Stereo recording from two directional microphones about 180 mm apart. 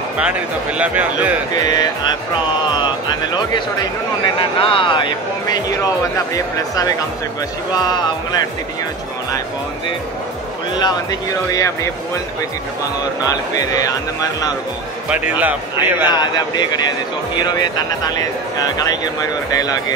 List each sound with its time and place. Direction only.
0.2 s speech: 10° right (ahead or behind)
1.6 s speech: 20° left (ahead or behind)
10.8 s speech: 20° left (ahead or behind)
13.3 s speech: 20° left (ahead or behind)
15.0 s speech: 10° right (ahead or behind)
16.1 s speech: 25° left (ahead or behind)
19.5 s speech: 20° left (ahead or behind)